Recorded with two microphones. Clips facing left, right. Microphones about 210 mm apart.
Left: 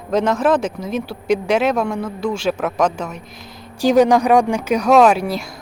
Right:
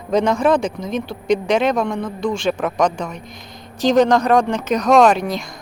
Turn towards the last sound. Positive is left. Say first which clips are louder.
# even
turn(degrees=5)  # may be behind; listen again after turning